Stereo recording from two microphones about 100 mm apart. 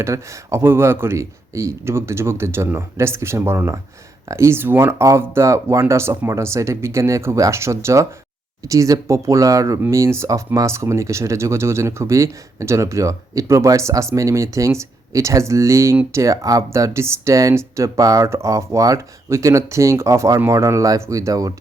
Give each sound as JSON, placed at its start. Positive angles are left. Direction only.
{"t": 0.0, "sound": "speech", "side_deg": -30}